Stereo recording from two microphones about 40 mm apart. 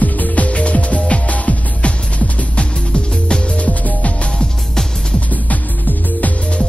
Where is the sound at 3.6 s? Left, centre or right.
Left.